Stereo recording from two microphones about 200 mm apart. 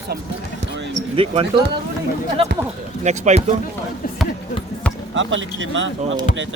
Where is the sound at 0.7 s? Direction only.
65° right (ahead or behind).